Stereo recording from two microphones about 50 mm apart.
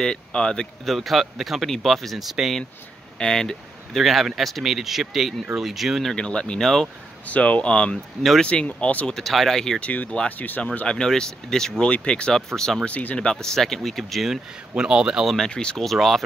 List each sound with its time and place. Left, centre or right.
0.0 s speech: centre
0.8 s speech: centre
3.2 s speech: centre
6.0 s speech: centre
7.2 s speech: left
9.1 s speech: centre
9.8 s speech: left
11.0 s speech: centre
11.9 s speech: left
12.8 s speech: left
13.2 s speech: centre
14.8 s speech: centre
15.5 s speech: centre
15.8 s speech: centre